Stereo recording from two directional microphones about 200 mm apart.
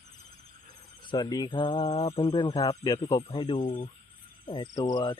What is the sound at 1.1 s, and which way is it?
Speech, 20° left (ahead or behind).